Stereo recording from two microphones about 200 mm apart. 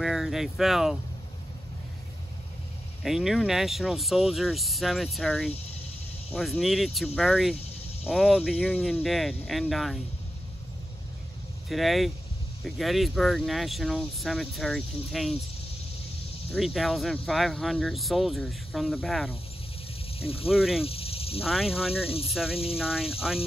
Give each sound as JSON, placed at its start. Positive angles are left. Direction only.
{"t": 0.0, "sound": "speech", "side_deg": 0}
{"t": 3.0, "sound": "speech", "side_deg": 0}
{"t": 11.7, "sound": "speech", "side_deg": 0}
{"t": 16.5, "sound": "speech", "side_deg": 0}
{"t": 20.2, "sound": "speech", "side_deg": 30}
{"t": 20.4, "sound": "speech", "side_deg": 0}
{"t": 20.8, "sound": "snake", "side_deg": 30}
{"t": 21.5, "sound": "speech", "side_deg": 0}